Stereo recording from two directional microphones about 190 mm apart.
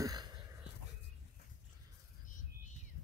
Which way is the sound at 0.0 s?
20° right (ahead or behind).